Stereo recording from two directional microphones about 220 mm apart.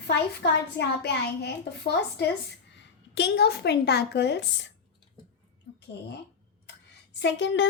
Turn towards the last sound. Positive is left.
turn(degrees=55)  # may be behind; listen again after turning